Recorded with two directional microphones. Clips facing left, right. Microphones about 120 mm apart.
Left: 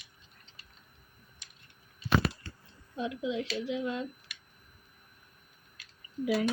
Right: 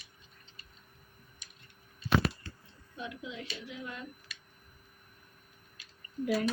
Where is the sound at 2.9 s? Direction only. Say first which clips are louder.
Left 9 dB; 90° left.